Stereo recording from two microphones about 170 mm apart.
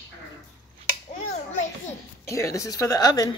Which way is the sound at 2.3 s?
15° left (ahead or behind).